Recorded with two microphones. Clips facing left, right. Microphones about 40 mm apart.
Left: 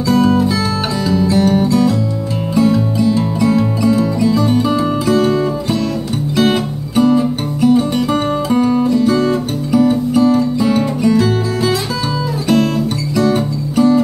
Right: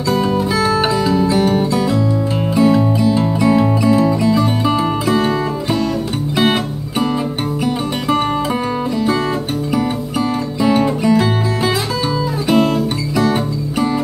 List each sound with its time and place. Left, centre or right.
0.0 s music: centre
9.1 s music: right
9.7 s music: centre
12.4 s guitar: centre